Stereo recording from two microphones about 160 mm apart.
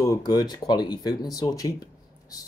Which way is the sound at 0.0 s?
20° left (ahead or behind).